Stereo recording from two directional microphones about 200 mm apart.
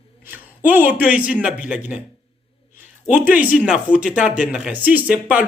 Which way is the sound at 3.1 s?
10° right (ahead or behind).